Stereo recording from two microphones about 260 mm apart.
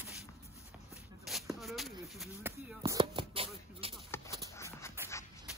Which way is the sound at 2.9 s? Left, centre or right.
Centre.